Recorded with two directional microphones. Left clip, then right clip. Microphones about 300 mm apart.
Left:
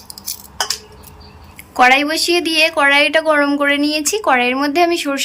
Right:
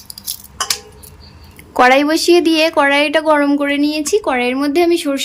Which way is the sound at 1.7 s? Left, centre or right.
Centre.